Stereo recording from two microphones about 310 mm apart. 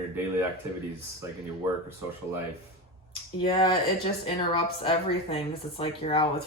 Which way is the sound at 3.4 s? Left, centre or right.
Centre.